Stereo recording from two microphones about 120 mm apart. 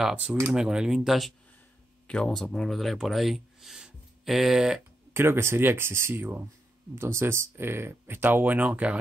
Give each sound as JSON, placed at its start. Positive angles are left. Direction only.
{"t": 0.0, "sound": "speech", "side_deg": -5}
{"t": 5.1, "sound": "speech", "side_deg": -20}